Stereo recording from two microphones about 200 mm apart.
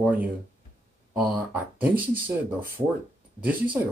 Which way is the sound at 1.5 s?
10° right (ahead or behind).